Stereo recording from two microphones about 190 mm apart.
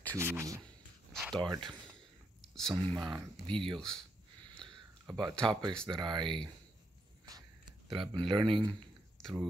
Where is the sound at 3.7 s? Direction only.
5° left (ahead or behind).